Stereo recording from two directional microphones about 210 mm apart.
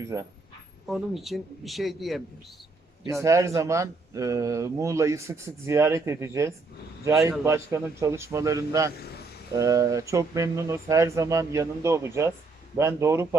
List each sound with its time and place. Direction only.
0.0 s speech: 15° right (ahead or behind)
0.9 s speech: centre (ahead or behind)
3.2 s speech: 15° right (ahead or behind)
8.9 s a man's voice: 50° left (ahead or behind)
9.5 s speech: 15° right (ahead or behind)